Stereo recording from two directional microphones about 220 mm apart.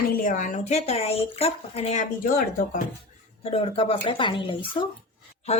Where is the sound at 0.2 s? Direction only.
35° left (ahead or behind).